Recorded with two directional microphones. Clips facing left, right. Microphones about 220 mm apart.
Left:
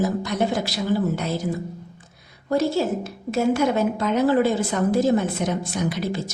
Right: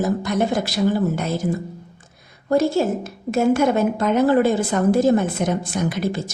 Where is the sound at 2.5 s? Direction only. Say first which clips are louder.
Right 3 dB; 50° right (ahead or behind).